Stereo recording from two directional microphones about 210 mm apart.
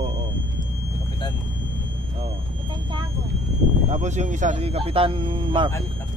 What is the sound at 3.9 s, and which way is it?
Speech, 35° right (ahead or behind).